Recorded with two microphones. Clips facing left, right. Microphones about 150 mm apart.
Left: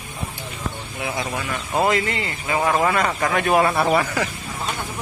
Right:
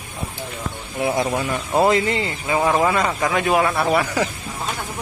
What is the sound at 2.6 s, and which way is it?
Speech, 5° right (ahead or behind).